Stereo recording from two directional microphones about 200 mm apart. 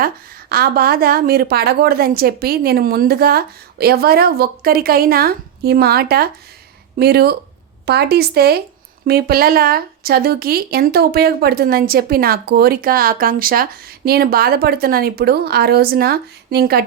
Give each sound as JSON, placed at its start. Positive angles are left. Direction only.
{"t": 0.5, "sound": "speech", "side_deg": -50}